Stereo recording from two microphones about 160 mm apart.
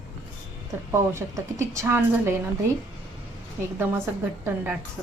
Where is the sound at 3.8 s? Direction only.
15° right (ahead or behind).